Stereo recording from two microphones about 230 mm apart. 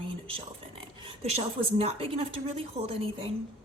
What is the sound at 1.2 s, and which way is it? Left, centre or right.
A woman's voice, right.